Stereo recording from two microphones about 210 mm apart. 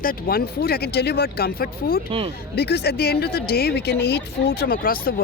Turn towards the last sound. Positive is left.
turn(degrees=45)  # may be behind; listen again after turning